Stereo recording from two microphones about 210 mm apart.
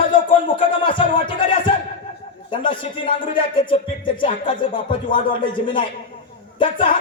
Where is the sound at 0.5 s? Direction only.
25° left (ahead or behind).